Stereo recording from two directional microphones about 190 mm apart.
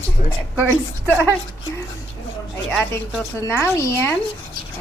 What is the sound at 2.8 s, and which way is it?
Speech, 10° left (ahead or behind).